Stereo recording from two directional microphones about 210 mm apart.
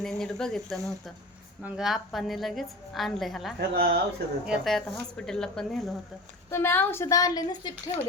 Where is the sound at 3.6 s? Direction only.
50° right (ahead or behind).